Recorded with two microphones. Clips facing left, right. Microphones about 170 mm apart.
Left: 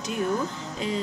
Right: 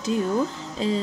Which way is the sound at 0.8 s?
30° right (ahead or behind).